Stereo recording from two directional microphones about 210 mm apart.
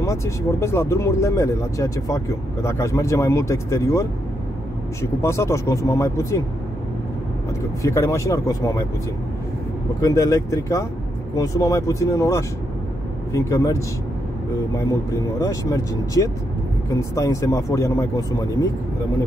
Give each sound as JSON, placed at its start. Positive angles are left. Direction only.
{"t": 0.0, "sound": "speech", "side_deg": 15}
{"t": 5.2, "sound": "speech", "side_deg": 15}
{"t": 7.8, "sound": "speech", "side_deg": 15}
{"t": 10.0, "sound": "speech", "side_deg": 15}